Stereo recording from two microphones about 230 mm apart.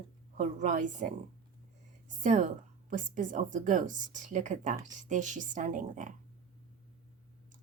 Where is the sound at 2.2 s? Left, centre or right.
Right.